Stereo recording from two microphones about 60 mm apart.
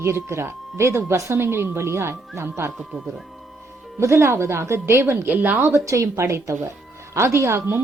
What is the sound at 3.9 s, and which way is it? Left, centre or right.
A woman's voice, right.